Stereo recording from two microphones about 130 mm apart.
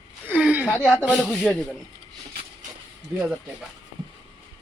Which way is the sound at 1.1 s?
Centre (ahead or behind).